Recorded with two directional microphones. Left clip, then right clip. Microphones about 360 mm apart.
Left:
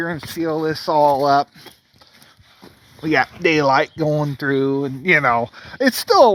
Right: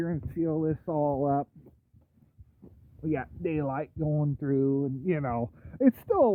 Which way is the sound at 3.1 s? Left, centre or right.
Left.